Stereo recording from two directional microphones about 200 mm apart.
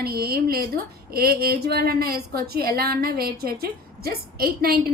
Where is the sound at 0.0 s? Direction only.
50° right (ahead or behind).